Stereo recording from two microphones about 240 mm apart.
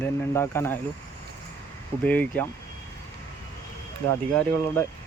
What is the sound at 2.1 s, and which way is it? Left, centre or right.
Speech, centre.